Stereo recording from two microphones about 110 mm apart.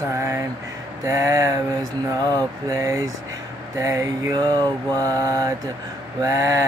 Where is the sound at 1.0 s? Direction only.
30° right (ahead or behind).